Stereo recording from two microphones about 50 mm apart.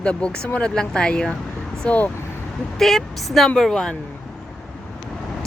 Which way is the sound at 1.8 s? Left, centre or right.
Left.